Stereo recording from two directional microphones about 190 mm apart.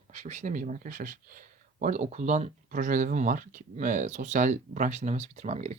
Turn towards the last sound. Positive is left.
turn(degrees=-35)  # may be behind; listen again after turning